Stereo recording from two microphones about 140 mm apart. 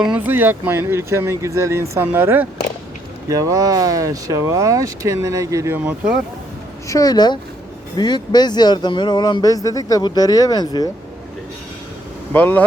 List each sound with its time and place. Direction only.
0.0 s speech: 10° right (ahead or behind)
3.2 s speech: 25° right (ahead or behind)
5.8 s speech: 10° right (ahead or behind)
6.8 s speech: 25° left (ahead or behind)
12.3 s speech: 15° left (ahead or behind)